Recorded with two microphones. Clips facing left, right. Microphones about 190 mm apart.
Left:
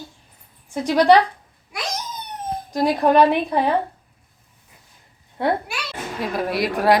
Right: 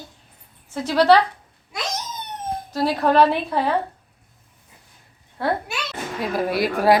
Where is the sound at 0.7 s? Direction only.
15° left (ahead or behind).